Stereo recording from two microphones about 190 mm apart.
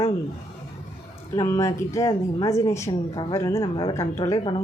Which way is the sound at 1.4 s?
15° left (ahead or behind).